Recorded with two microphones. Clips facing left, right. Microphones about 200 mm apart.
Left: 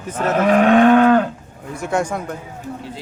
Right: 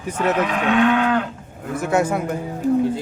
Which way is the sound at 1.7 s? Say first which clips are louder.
Right 2 dB; 5° right (ahead or behind).